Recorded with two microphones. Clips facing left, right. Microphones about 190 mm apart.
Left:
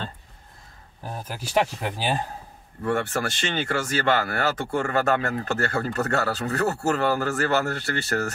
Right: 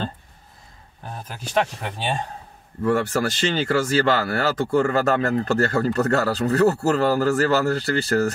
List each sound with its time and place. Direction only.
1.2 s speech: 10° left (ahead or behind)
3.1 s speech: 35° right (ahead or behind)